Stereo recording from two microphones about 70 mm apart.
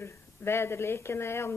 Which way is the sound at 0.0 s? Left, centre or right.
Left.